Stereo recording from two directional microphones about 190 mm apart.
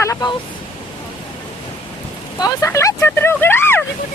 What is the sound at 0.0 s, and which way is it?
Vehicle, 20° left (ahead or behind).